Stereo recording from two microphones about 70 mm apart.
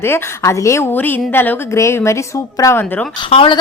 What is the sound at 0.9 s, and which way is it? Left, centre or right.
Speech, left.